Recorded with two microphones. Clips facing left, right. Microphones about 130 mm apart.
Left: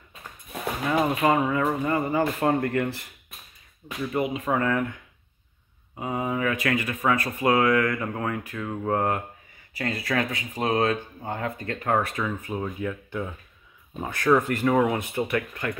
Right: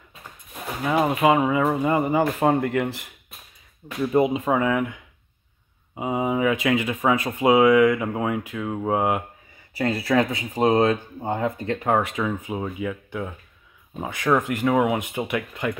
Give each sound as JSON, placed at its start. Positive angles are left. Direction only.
{"t": 0.9, "sound": "speech", "side_deg": -20}
{"t": 4.1, "sound": "speech", "side_deg": -25}
{"t": 4.6, "sound": "speech", "side_deg": -10}
{"t": 5.9, "sound": "speech", "side_deg": -15}
{"t": 9.8, "sound": "speech", "side_deg": -30}